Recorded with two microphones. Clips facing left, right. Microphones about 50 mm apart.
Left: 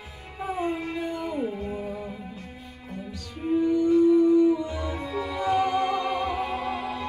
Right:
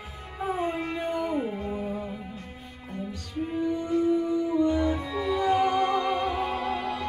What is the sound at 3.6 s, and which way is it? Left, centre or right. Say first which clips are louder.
Music: left 6 dB; right.